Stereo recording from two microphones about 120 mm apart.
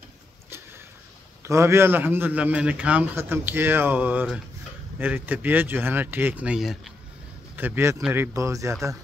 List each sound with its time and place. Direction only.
1.4 s speech: 25° right (ahead or behind); by 6.9 s centre (ahead or behind)
7.5 s speech: 15° right (ahead or behind)